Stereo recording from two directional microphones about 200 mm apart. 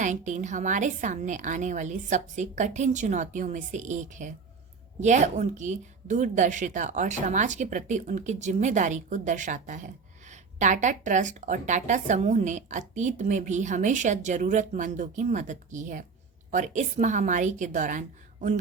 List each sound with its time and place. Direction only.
0.0 s speech: 40° right (ahead or behind)